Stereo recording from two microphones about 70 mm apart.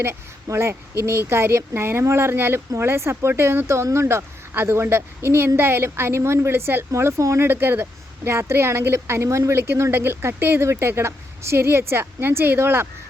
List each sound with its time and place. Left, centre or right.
0.5 s speech: right
7.4 s speech: right